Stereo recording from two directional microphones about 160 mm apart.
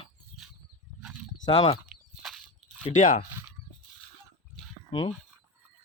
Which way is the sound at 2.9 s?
55° left (ahead or behind).